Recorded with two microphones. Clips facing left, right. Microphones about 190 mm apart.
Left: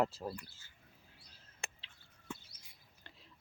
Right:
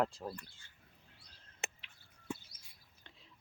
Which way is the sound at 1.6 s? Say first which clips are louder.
Right 4 dB; 20° right (ahead or behind).